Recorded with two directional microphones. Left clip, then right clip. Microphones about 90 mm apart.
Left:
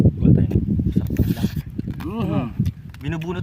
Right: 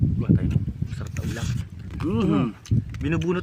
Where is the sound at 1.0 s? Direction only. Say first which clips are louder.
Left 8 dB; 35° left (ahead or behind).